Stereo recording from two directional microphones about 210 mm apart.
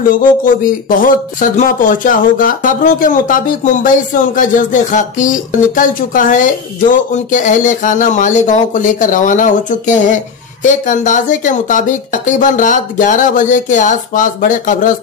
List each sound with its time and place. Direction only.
0.1 s speech: 40° left (ahead or behind)